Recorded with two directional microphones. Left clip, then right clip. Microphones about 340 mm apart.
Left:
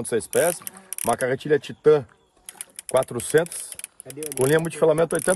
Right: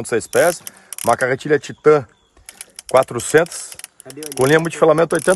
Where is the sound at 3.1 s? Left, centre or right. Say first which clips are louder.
Right 6 dB; centre.